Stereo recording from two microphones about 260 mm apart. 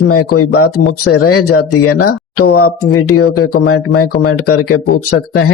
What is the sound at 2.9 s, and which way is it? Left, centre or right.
Speech, left.